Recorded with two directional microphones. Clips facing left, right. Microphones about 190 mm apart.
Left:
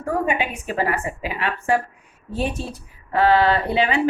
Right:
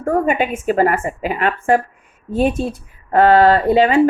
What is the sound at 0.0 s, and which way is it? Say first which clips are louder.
A woman's voice: right 6 dB; 45° right (ahead or behind).